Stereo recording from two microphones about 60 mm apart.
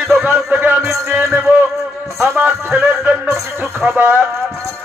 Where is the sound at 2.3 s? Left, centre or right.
Right.